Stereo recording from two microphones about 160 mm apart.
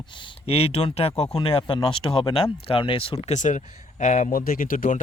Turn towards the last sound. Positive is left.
turn(degrees=55)  # may be behind; listen again after turning